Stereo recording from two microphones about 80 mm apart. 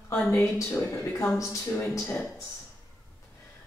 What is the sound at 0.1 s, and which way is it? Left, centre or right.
A woman's voice, left.